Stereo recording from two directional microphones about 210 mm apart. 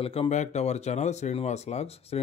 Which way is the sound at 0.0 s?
25° left (ahead or behind).